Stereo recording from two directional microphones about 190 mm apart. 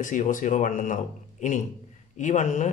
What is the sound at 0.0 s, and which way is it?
Speech, 40° left (ahead or behind).